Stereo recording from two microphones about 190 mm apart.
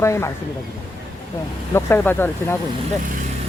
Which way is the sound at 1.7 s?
10° left (ahead or behind).